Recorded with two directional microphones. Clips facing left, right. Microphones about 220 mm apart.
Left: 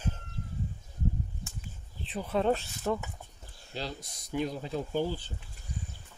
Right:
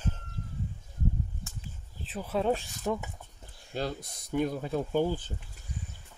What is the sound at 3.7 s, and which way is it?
Speech, 50° right (ahead or behind).